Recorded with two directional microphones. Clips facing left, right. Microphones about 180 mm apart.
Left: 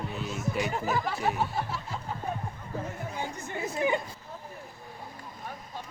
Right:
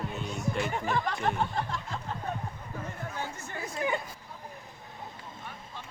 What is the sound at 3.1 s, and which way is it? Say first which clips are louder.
Speech: left 2 dB; 15° left (ahead or behind).